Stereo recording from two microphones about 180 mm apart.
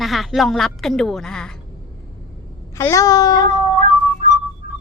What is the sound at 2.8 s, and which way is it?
Speech, 15° left (ahead or behind).